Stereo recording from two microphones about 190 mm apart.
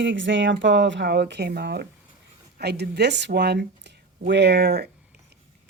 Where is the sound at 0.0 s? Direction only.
75° right (ahead or behind).